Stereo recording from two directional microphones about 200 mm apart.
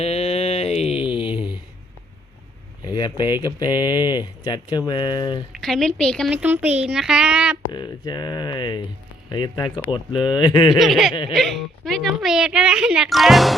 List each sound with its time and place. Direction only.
0.0 s a sound: 30° left (ahead or behind)
2.8 s speech: 20° left (ahead or behind)
5.5 s speech: centre (ahead or behind)
7.7 s speech: 20° left (ahead or behind)
10.8 s speech: centre (ahead or behind)